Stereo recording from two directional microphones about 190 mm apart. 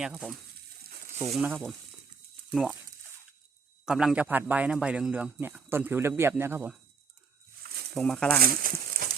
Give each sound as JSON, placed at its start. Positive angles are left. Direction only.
{"t": 0.0, "sound": "speech", "side_deg": 0}
{"t": 1.4, "sound": "speech", "side_deg": -5}
{"t": 3.8, "sound": "a man's voice", "side_deg": -5}
{"t": 7.9, "sound": "speech", "side_deg": 0}
{"t": 8.4, "sound": "speech", "side_deg": -50}